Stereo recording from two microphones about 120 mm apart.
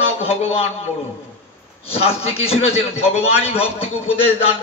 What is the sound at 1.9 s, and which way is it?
A man's voice, 55° left (ahead or behind).